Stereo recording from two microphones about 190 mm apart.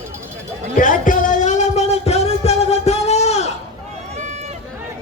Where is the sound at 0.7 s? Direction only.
45° left (ahead or behind).